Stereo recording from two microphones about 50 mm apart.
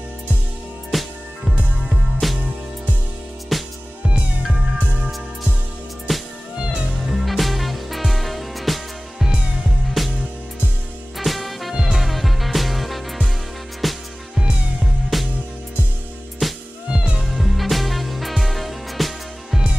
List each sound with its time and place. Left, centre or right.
0.9 s music: centre
2.2 s music: centre
3.5 s music: centre
6.1 s music: centre
9.3 s music: centre
9.8 s music: centre
11.1 s music: centre
16.4 s music: centre
16.9 s music: centre
17.2 s music: centre